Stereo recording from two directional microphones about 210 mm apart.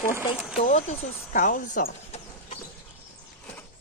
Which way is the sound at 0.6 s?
30° left (ahead or behind).